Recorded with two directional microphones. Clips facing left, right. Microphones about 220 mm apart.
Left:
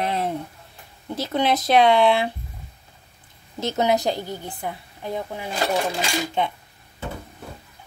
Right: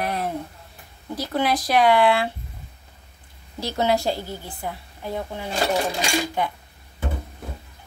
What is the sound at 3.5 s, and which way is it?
A woman's voice, 20° left (ahead or behind).